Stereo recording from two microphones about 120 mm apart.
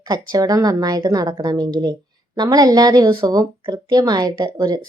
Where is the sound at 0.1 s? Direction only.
30° right (ahead or behind).